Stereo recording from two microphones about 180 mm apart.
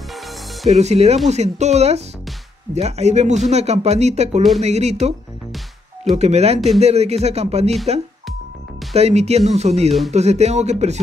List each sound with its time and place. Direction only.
0.7 s speech: 40° right (ahead or behind)
8.9 s speech: 35° right (ahead or behind)